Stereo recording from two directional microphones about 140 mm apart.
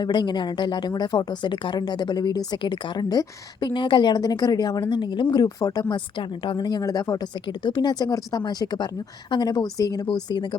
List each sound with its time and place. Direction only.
0.0 s a woman's voice: 30° left (ahead or behind)